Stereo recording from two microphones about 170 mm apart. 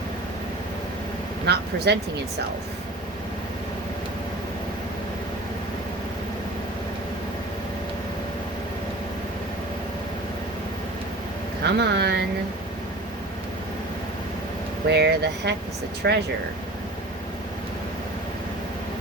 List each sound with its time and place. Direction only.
1.5 s speech: 75° right (ahead or behind)
11.6 s speech: 80° right
14.8 s speech: 80° right